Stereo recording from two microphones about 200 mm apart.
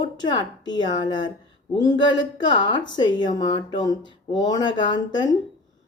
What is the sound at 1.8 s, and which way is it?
Speech, 65° left (ahead or behind).